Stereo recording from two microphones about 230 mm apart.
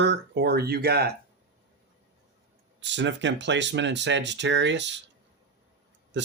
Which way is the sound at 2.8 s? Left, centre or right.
Right.